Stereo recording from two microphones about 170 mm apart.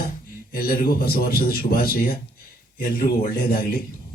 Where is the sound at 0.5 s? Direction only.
60° left (ahead or behind).